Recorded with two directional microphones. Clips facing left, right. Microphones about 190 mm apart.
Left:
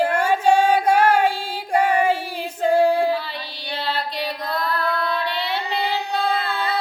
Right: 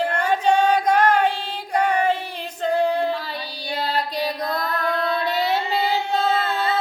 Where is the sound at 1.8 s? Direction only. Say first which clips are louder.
Left 1 dB; 10° left (ahead or behind).